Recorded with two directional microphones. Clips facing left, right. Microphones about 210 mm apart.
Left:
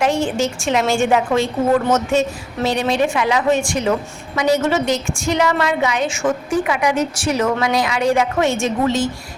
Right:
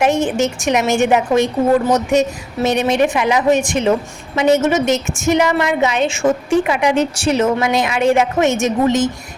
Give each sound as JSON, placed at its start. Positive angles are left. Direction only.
{"t": 0.0, "sound": "a woman's voice", "side_deg": -20}